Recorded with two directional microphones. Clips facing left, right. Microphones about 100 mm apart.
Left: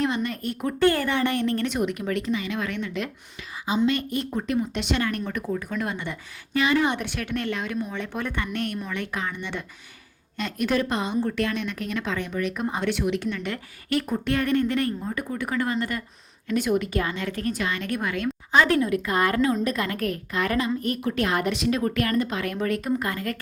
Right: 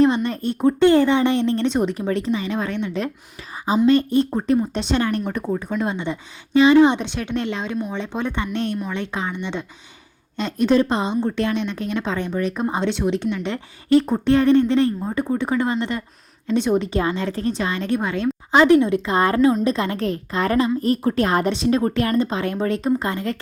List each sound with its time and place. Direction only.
0.0 s speech: 30° right (ahead or behind)